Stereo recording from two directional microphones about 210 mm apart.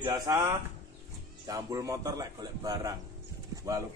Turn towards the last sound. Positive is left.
turn(degrees=-15)  # may be behind; listen again after turning